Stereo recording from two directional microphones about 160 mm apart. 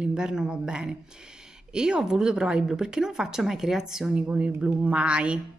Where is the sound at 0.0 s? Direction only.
5° right (ahead or behind).